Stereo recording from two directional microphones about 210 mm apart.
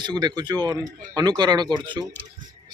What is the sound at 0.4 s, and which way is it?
Speech, 20° right (ahead or behind).